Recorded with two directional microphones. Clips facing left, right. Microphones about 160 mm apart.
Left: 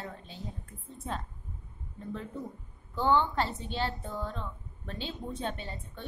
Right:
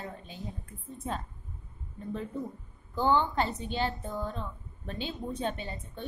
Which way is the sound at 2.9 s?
15° right (ahead or behind).